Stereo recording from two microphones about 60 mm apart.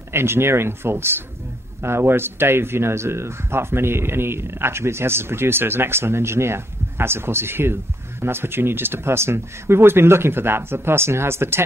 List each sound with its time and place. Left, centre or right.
0.1 s speech: right